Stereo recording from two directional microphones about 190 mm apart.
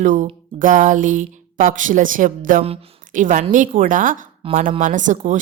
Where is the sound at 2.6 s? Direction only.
30° right (ahead or behind).